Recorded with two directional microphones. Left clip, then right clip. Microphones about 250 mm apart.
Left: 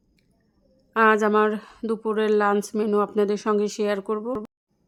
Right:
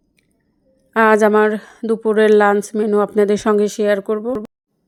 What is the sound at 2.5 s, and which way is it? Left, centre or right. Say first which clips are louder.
A woman's voice: right 6 dB; centre.